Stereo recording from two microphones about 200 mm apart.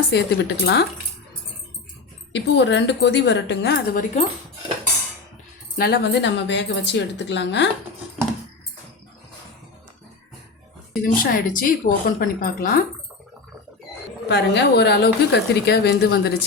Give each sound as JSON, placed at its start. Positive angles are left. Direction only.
{"t": 0.1, "sound": "a woman's voice", "side_deg": 55}
{"t": 2.3, "sound": "a woman's voice", "side_deg": 60}
{"t": 5.7, "sound": "a woman's voice", "side_deg": 50}
{"t": 11.0, "sound": "a woman's voice", "side_deg": 45}
{"t": 14.3, "sound": "a woman's voice", "side_deg": 55}